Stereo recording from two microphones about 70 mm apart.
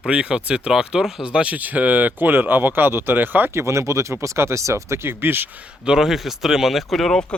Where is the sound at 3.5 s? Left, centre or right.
Right.